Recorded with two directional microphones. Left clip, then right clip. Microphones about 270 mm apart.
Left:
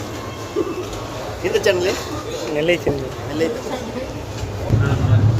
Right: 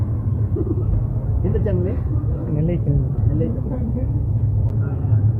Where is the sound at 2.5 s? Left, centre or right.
Centre.